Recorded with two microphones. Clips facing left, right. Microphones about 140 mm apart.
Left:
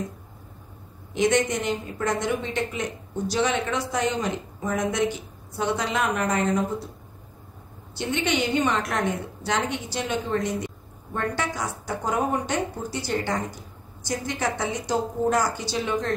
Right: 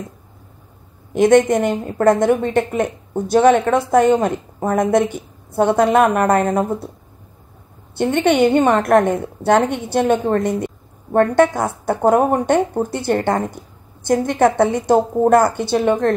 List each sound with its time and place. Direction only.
1.1 s a woman's voice: 55° right (ahead or behind)
7.9 s a woman's voice: 55° right (ahead or behind)